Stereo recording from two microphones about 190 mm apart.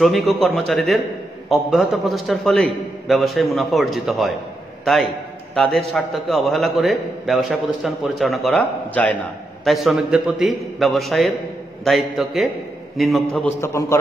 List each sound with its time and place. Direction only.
0.0 s a man's voice: centre (ahead or behind)
5.5 s a man's voice: centre (ahead or behind)
13.6 s a man's voice: 15° left (ahead or behind)